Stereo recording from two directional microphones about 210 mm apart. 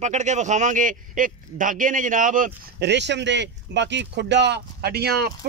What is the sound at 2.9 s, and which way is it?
Speech, 55° right (ahead or behind).